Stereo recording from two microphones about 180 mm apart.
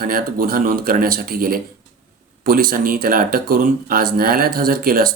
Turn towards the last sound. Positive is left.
turn(degrees=-55)  # may be behind; listen again after turning